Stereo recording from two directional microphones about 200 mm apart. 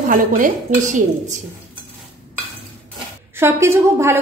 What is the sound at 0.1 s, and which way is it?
A woman's voice, 40° right (ahead or behind).